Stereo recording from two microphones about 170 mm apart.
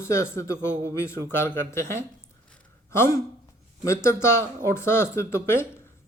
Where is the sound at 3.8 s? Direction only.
15° left (ahead or behind).